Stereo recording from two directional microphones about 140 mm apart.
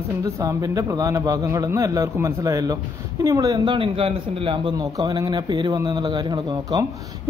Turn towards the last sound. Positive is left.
turn(degrees=-30)  # may be behind; listen again after turning